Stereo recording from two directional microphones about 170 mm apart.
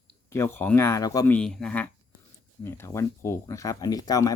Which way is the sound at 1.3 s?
5° left (ahead or behind).